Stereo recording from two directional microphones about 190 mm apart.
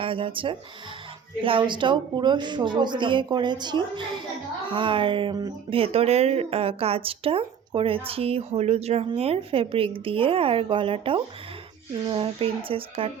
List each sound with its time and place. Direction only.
0.0 s speech: 30° right (ahead or behind)